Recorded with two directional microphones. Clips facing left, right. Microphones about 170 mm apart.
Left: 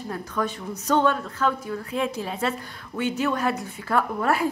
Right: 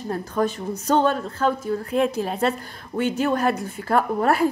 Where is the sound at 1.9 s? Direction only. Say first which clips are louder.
Right 5 dB; 50° right (ahead or behind).